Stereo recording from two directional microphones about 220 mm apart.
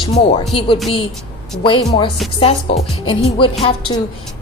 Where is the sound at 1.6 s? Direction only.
20° left (ahead or behind).